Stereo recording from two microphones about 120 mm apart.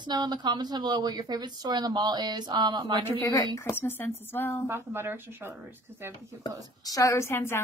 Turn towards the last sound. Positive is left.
turn(degrees=20)  # may be behind; listen again after turning